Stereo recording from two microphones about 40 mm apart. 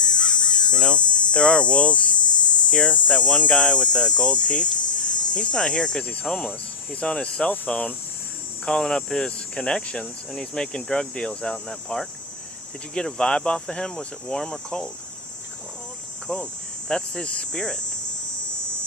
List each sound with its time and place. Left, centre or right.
0.0 s caw: left
2.6 s speech: left
7.0 s speech: left
7.7 s cricket: left
8.6 s speech: centre
13.1 s speech: left
16.2 s cricket: left
16.9 s speech: left
17.2 s cricket: left